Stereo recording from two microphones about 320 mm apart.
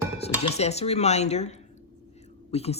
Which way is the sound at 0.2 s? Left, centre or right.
Centre.